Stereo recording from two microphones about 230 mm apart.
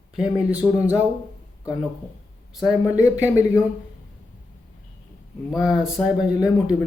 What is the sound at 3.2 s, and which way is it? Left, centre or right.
Speech, centre.